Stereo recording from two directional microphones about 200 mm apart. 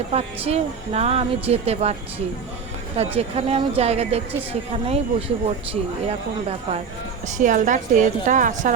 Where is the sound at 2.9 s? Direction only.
30° right (ahead or behind).